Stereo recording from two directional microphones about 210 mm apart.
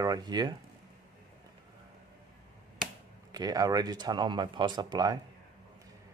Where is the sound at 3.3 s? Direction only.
20° right (ahead or behind).